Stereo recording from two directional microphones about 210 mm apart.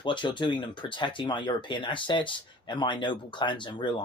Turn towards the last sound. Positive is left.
turn(degrees=20)  # may be behind; listen again after turning